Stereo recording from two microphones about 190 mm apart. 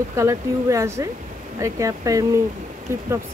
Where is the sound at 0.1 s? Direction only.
15° right (ahead or behind).